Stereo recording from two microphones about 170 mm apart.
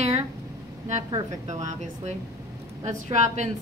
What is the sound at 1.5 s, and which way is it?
A woman's voice, 45° right (ahead or behind).